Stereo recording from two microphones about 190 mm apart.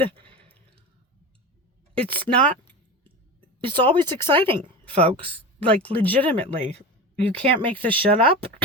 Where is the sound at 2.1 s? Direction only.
30° right (ahead or behind).